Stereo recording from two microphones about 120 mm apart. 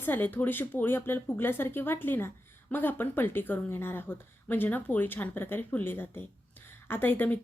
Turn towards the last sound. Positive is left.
turn(degrees=15)  # may be behind; listen again after turning